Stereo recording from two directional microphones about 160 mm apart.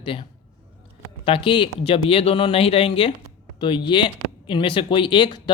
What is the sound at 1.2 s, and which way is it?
Speech, 35° left (ahead or behind).